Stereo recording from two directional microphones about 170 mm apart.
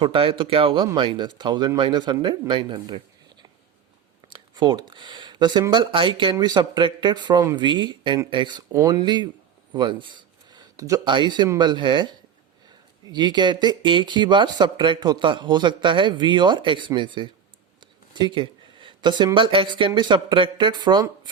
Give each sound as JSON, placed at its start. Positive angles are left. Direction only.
{"t": 0.0, "sound": "speech", "side_deg": -30}